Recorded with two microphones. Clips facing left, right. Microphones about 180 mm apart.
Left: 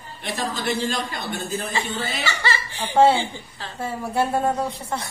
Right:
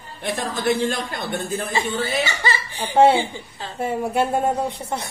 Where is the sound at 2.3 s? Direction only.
15° right (ahead or behind).